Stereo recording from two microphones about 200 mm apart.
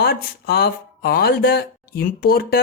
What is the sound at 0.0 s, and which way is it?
Speech, 50° left (ahead or behind).